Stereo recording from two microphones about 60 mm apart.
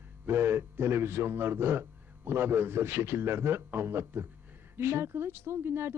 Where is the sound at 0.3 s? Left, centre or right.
Right.